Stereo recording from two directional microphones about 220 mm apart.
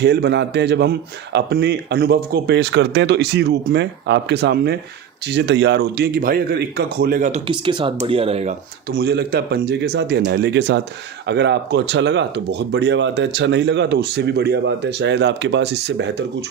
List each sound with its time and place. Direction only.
0.0 s speech: 50° right (ahead or behind); by 8.5 s 30° right (ahead or behind)
8.9 s speech: 50° right (ahead or behind)